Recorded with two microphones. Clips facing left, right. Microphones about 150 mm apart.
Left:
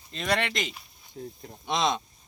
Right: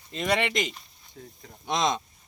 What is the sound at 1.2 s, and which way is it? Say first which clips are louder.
Speech: left 7 dB; 25° left (ahead or behind).